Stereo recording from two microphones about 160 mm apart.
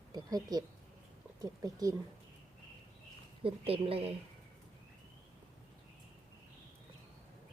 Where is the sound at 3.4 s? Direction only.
35° right (ahead or behind).